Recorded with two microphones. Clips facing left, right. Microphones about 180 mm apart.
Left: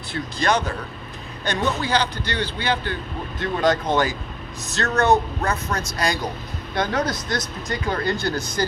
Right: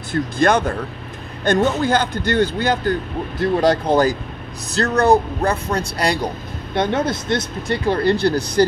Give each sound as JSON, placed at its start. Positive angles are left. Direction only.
{"t": 0.1, "sound": "a man's voice", "side_deg": -50}